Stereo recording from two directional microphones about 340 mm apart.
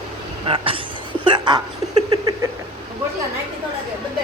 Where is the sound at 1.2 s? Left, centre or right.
Centre.